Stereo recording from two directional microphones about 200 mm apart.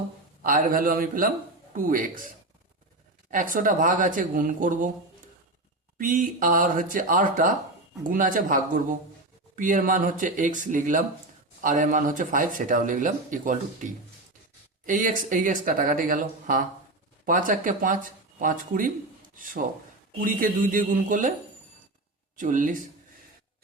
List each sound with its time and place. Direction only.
0.4 s speech: 45° right (ahead or behind)
6.0 s speech: 40° right (ahead or behind)
20.2 s speech: 45° right (ahead or behind)
22.4 s speech: 40° right (ahead or behind)